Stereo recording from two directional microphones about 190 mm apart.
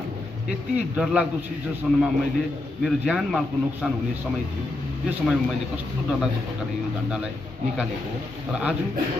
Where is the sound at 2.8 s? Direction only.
Centre (ahead or behind).